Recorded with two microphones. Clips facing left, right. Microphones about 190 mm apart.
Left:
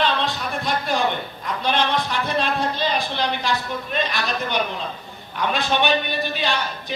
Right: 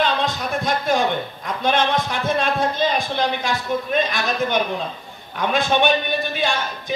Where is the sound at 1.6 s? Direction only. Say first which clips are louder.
Right 2 dB; 50° right (ahead or behind).